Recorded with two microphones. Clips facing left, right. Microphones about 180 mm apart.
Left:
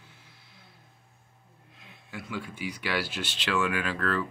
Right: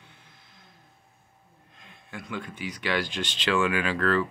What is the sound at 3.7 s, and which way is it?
Speech, 90° right.